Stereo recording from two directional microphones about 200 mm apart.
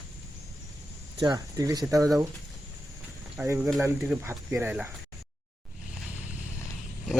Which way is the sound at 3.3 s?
10° right (ahead or behind).